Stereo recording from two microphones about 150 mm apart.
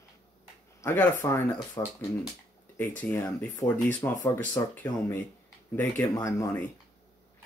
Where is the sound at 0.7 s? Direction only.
15° left (ahead or behind).